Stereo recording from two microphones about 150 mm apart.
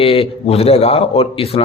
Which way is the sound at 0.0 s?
40° left (ahead or behind).